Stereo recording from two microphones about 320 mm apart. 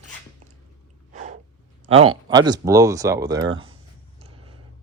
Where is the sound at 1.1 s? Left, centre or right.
Right.